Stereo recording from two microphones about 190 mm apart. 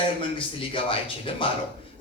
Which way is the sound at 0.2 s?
25° left (ahead or behind).